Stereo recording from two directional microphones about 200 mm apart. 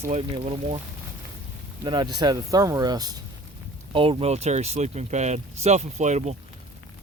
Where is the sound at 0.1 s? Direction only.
30° right (ahead or behind).